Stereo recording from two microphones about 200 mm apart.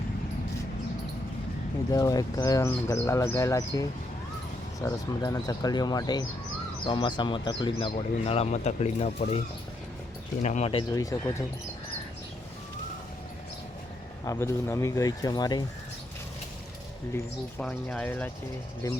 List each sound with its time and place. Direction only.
1.9 s speech: 20° left (ahead or behind)
10.4 s speech: 35° left (ahead or behind); by 11.4 s 15° left (ahead or behind)
14.3 s speech: 15° left (ahead or behind)
17.6 s speech: 5° left (ahead or behind)